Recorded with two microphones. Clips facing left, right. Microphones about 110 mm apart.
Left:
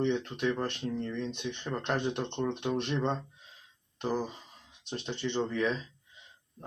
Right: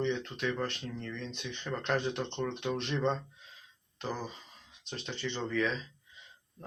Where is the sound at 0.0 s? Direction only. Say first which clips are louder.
Left 3 dB; 15° left (ahead or behind).